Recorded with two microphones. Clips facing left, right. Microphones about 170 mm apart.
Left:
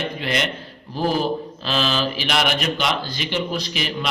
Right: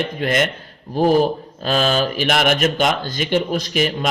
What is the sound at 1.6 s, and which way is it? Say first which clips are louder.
A man's voice: right 5 dB; 50° right (ahead or behind).